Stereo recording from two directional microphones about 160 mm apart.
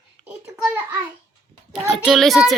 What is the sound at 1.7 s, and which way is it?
Speech, centre (ahead or behind).